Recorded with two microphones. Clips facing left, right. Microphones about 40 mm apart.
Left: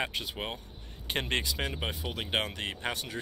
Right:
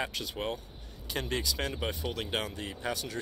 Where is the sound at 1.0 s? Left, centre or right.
Left.